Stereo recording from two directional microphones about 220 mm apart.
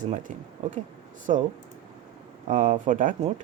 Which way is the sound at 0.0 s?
35° right (ahead or behind).